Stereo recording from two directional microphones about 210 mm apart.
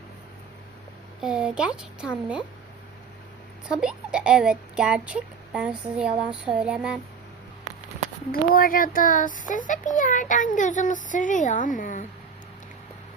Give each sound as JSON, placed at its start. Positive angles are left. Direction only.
{"t": 1.2, "sound": "speech", "side_deg": -5}
{"t": 3.7, "sound": "speech", "side_deg": -5}
{"t": 8.3, "sound": "a child's voice", "side_deg": 45}